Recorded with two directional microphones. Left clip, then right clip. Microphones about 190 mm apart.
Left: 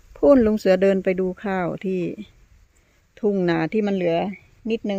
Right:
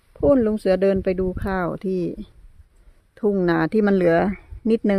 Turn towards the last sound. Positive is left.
turn(degrees=-40)  # may be behind; listen again after turning